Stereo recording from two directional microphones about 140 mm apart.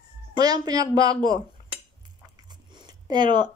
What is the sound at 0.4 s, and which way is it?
Speech, 25° right (ahead or behind).